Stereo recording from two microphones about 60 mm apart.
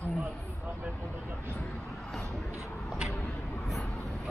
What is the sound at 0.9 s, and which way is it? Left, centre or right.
Speech, left.